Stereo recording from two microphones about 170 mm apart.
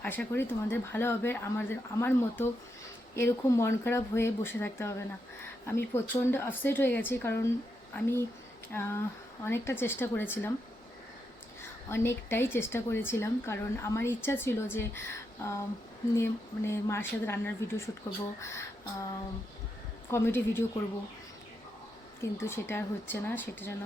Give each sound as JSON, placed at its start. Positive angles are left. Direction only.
{"t": 0.0, "sound": "speech", "side_deg": 10}
{"t": 11.9, "sound": "speech", "side_deg": 15}
{"t": 20.1, "sound": "speech", "side_deg": 15}
{"t": 22.2, "sound": "speech", "side_deg": 15}